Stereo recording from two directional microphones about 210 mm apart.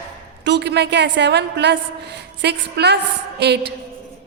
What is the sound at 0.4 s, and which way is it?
A woman's voice, 55° right (ahead or behind).